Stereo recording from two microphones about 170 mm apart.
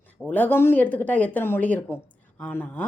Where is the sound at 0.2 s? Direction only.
10° left (ahead or behind).